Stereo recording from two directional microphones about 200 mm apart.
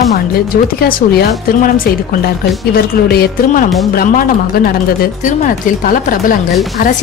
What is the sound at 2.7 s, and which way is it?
Speech, 50° left (ahead or behind).